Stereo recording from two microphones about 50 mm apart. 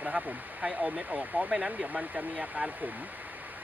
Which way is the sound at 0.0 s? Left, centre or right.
Right.